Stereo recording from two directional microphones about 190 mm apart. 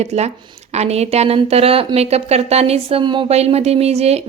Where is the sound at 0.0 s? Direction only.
35° right (ahead or behind).